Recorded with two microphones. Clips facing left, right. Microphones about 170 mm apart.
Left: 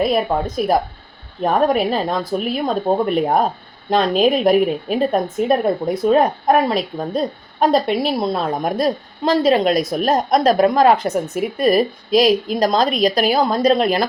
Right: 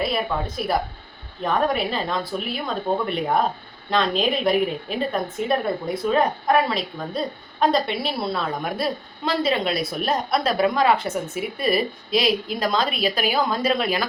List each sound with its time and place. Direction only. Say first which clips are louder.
0.0 s a woman's voice: left 7 dB; 45° left (ahead or behind)